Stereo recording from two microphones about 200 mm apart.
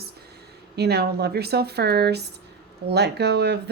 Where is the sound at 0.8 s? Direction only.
55° right (ahead or behind).